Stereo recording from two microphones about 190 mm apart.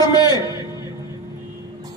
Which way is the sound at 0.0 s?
20° left (ahead or behind).